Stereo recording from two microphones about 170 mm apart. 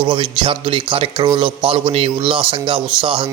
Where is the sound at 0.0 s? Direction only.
30° right (ahead or behind).